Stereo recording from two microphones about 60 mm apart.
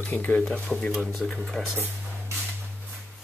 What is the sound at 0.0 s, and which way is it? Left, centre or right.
Speech, left.